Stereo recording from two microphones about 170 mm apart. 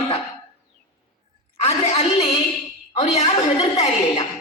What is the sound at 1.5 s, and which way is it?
A woman's voice, 40° left (ahead or behind).